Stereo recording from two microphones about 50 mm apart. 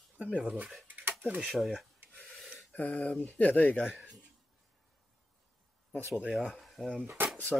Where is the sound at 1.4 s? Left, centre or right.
Centre.